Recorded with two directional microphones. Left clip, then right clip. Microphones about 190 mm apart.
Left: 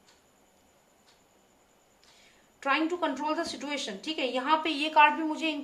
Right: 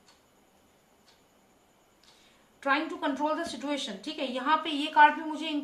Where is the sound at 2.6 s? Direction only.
45° left (ahead or behind).